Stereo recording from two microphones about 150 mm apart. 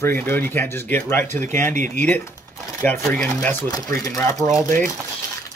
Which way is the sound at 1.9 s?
10° left (ahead or behind).